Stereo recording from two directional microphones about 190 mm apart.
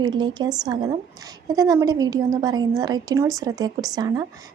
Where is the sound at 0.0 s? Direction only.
20° right (ahead or behind).